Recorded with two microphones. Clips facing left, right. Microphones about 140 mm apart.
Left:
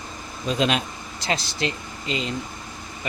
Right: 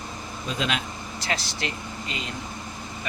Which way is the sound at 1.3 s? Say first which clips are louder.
Left 5 dB; 25° left (ahead or behind).